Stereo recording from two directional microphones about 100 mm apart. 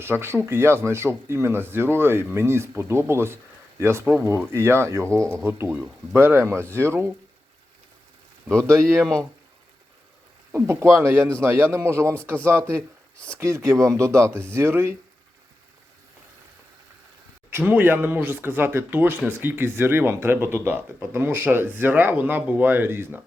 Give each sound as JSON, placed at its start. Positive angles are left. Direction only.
{"t": 0.0, "sound": "speech", "side_deg": -25}
{"t": 8.5, "sound": "speech", "side_deg": -30}
{"t": 9.0, "sound": "speech", "side_deg": 5}
{"t": 10.5, "sound": "speech", "side_deg": -25}
{"t": 17.6, "sound": "speech", "side_deg": -20}